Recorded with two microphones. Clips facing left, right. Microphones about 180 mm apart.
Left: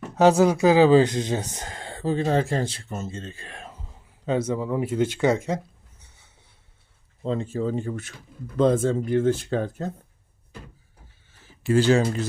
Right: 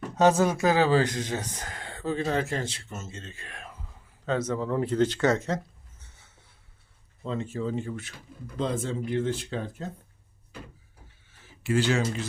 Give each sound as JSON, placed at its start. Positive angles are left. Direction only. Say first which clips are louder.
{"t": 0.2, "sound": "speech", "louder": "left 4 dB", "side_deg": 15}
{"t": 4.3, "sound": "speech", "louder": "left 3 dB", "side_deg": 10}
{"t": 7.2, "sound": "speech", "louder": "left 5 dB", "side_deg": 30}
{"t": 11.6, "sound": "speech", "louder": "left 6 dB", "side_deg": 35}